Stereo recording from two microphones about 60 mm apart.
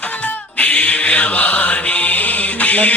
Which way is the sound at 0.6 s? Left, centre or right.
Left.